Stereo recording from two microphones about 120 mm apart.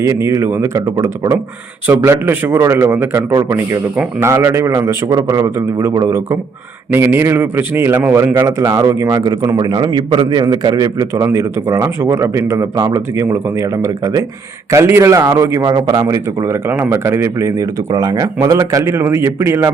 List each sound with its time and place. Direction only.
0.0 s a man's voice: 25° right (ahead or behind)
1.9 s a man's voice: 20° right (ahead or behind)